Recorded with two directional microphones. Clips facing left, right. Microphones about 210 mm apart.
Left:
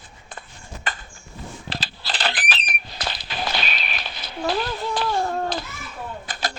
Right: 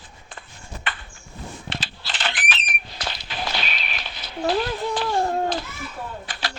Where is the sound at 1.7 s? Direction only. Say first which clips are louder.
Left 4 dB; 35° left (ahead or behind).